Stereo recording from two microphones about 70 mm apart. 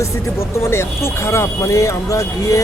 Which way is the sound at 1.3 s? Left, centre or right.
Left.